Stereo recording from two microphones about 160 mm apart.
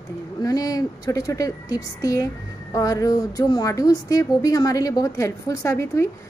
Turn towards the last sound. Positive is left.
turn(degrees=15)  # may be behind; listen again after turning